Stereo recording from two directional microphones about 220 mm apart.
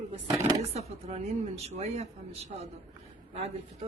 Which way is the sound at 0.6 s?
30° right (ahead or behind).